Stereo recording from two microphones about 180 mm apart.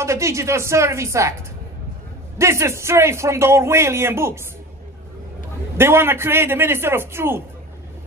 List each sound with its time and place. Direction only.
0.0 s a man's voice: 15° right (ahead or behind)
2.3 s a man's voice: 15° right (ahead or behind)
5.8 s a man's voice: 15° right (ahead or behind)